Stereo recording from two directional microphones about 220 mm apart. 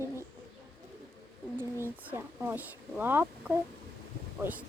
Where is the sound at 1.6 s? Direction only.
10° right (ahead or behind).